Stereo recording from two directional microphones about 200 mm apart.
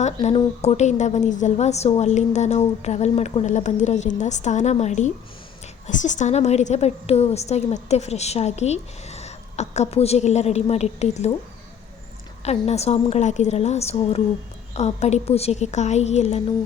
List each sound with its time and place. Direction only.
0.0 s a woman's voice: 30° left (ahead or behind)
12.5 s a woman's voice: 30° left (ahead or behind)